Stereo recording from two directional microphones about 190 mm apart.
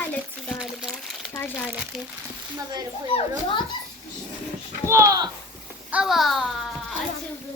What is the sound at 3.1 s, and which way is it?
Speech, 25° left (ahead or behind).